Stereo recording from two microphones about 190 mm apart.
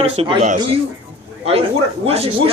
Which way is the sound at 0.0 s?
30° right (ahead or behind).